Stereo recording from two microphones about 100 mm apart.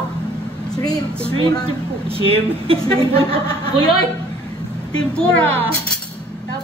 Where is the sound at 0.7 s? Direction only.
40° left (ahead or behind).